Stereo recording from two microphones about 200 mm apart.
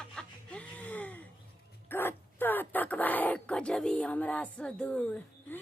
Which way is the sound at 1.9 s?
10° left (ahead or behind).